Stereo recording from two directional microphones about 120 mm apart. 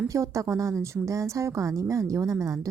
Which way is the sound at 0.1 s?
25° right (ahead or behind).